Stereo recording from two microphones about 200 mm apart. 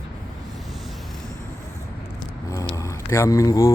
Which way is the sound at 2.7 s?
15° left (ahead or behind).